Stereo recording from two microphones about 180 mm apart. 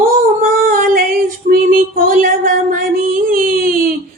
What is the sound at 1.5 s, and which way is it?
Female singing, 55° right (ahead or behind).